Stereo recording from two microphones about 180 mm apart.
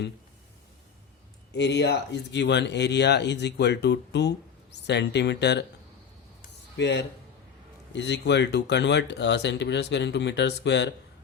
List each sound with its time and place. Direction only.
1.5 s speech: 75° left (ahead or behind)
6.7 s speech: 75° left (ahead or behind)